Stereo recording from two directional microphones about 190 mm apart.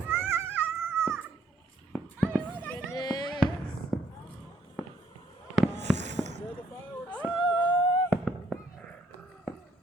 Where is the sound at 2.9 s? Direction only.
20° left (ahead or behind).